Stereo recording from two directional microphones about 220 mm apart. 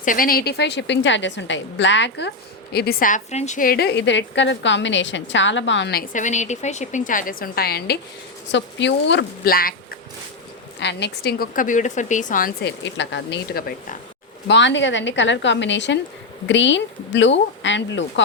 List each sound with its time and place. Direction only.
0.0 s a woman's voice: 40° left (ahead or behind)
14.4 s speech: 55° left (ahead or behind)